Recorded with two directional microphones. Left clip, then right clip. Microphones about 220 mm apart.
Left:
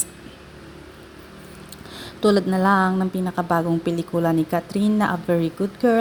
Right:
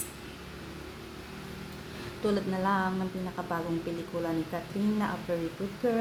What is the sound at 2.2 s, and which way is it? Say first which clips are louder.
A woman's voice: left 11 dB; 35° left (ahead or behind).